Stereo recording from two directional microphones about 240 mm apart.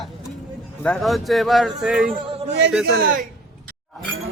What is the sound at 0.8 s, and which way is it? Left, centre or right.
Speech, centre.